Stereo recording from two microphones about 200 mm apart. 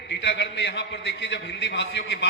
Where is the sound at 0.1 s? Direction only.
60° left (ahead or behind).